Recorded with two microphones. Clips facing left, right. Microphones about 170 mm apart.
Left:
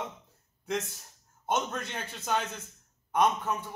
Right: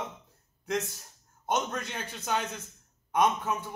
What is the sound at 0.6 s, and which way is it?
A man's voice, centre (ahead or behind).